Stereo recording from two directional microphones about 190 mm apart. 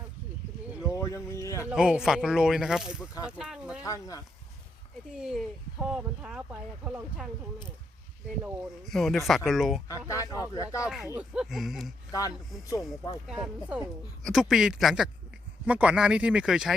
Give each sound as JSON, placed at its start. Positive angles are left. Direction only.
{"t": 0.9, "sound": "a sound", "side_deg": 15}
{"t": 1.7, "sound": "speech", "side_deg": -5}
{"t": 3.8, "sound": "speech", "side_deg": 15}
{"t": 5.1, "sound": "speech", "side_deg": -5}
{"t": 8.9, "sound": "speech", "side_deg": 0}
{"t": 10.1, "sound": "speech", "side_deg": 15}
{"t": 10.8, "sound": "speech", "side_deg": 0}
{"t": 13.2, "sound": "speech", "side_deg": -5}